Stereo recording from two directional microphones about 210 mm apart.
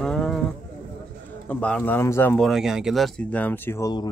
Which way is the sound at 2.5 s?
Centre (ahead or behind).